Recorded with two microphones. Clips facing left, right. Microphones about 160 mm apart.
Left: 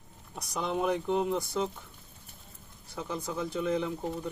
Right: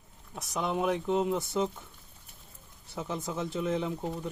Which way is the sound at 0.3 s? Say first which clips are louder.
Right 1 dB; centre (ahead or behind).